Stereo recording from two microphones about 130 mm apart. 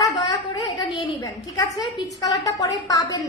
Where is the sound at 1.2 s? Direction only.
25° left (ahead or behind).